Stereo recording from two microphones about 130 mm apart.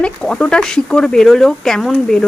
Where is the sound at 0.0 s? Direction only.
5° left (ahead or behind).